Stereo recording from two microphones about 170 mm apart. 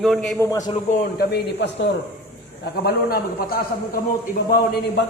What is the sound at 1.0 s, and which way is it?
Speech, 70° left (ahead or behind).